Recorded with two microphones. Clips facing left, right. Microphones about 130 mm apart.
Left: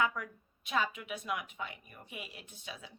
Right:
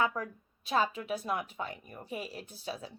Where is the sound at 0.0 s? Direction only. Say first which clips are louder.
Right 2 dB; 35° right (ahead or behind).